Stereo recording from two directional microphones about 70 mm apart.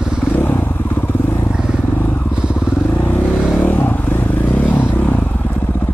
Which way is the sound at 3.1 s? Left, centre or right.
Left.